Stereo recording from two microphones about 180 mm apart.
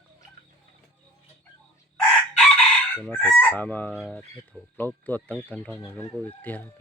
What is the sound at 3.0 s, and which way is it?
Speech, 10° left (ahead or behind).